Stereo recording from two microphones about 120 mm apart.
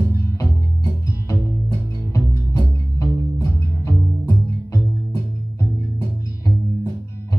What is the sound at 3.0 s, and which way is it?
Music, 25° left (ahead or behind).